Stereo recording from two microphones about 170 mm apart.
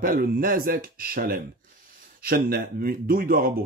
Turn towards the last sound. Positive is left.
turn(degrees=-55)  # may be behind; listen again after turning